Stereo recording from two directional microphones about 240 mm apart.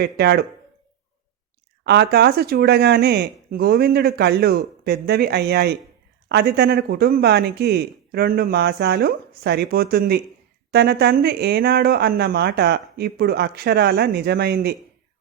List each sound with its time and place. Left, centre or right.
0.0 s speech: right
1.8 s speech: right